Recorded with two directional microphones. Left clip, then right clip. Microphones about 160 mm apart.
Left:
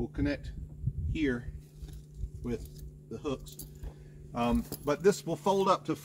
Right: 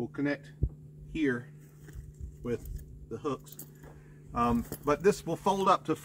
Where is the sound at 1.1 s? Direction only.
15° left (ahead or behind).